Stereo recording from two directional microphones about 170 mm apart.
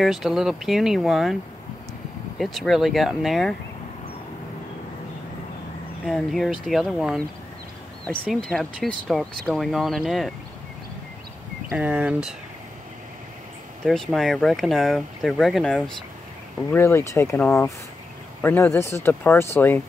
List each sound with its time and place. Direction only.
0.0 s speech: centre (ahead or behind)
6.0 s speech: centre (ahead or behind)
11.7 s speech: 10° right (ahead or behind)
13.8 s speech: centre (ahead or behind)
16.7 s speech: 15° left (ahead or behind)